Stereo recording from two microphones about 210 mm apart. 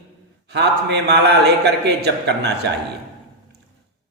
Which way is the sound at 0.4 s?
55° right (ahead or behind).